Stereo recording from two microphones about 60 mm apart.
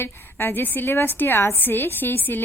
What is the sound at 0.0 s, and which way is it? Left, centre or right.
A woman's voice, left.